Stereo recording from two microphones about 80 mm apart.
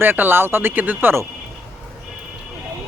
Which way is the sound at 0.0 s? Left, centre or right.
Right.